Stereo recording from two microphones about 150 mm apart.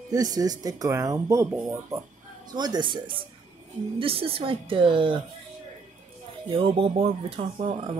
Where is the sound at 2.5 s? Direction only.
25° right (ahead or behind).